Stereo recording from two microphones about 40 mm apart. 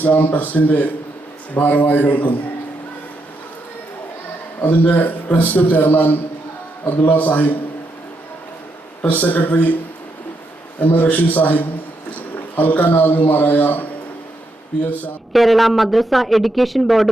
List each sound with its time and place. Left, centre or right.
0.0 s a man's voice: left
4.6 s a man's voice: left
9.0 s a man's voice: left
10.8 s a man's voice: left
15.3 s speech: centre